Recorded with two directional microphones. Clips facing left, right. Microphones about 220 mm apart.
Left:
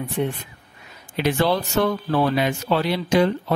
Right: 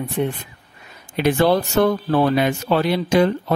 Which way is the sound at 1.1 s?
50° right (ahead or behind).